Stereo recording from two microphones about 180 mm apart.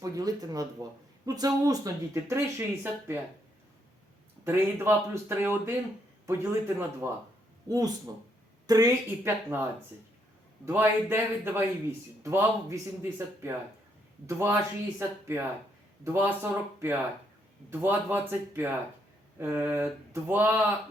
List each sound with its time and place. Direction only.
0.0 s speech: 20° right (ahead or behind)
4.4 s speech: 15° right (ahead or behind)
10.7 s speech: 10° right (ahead or behind)